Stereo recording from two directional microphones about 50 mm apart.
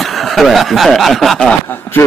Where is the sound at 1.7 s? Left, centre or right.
Left.